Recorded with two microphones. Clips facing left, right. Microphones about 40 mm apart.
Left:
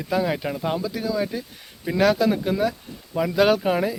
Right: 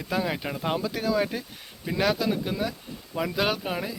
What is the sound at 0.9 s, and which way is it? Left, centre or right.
Speech, right.